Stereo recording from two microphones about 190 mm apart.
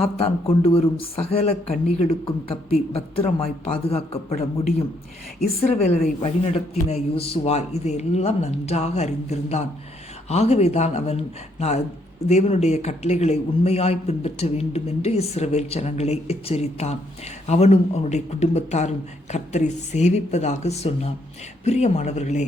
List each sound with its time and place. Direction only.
0.0 s a man's voice: 30° left (ahead or behind)